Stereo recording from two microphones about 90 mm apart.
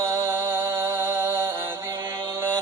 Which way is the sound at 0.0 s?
35° right (ahead or behind).